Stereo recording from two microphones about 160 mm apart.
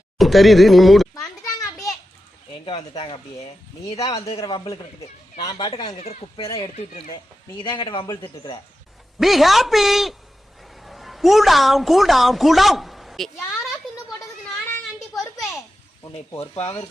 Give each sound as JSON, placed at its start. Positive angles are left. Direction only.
{"t": 0.2, "sound": "speech", "side_deg": 0}
{"t": 1.1, "sound": "children playing", "side_deg": 20}
{"t": 2.5, "sound": "speech", "side_deg": 35}
{"t": 3.8, "sound": "speech", "side_deg": 20}
{"t": 6.0, "sound": "speech", "side_deg": 40}
{"t": 9.1, "sound": "a woman's voice", "side_deg": 0}
{"t": 16.4, "sound": "speech", "side_deg": 35}